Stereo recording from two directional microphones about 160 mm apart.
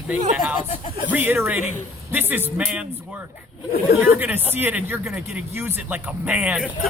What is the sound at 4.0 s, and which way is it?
Music, 10° right (ahead or behind).